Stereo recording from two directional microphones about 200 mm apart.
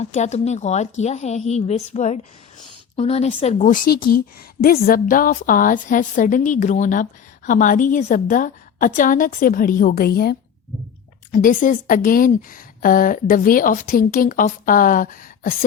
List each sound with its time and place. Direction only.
0.0 s a woman's voice: 35° left (ahead or behind)